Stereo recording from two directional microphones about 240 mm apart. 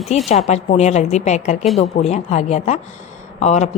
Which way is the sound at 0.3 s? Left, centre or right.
Left.